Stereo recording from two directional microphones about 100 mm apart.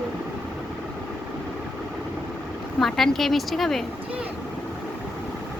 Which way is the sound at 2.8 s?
5° left (ahead or behind).